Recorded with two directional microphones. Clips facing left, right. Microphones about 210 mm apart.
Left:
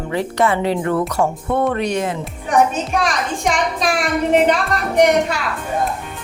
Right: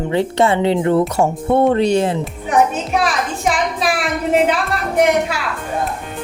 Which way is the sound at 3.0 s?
5° right (ahead or behind).